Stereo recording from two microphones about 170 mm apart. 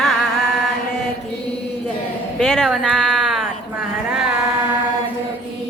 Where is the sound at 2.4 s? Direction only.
Centre (ahead or behind).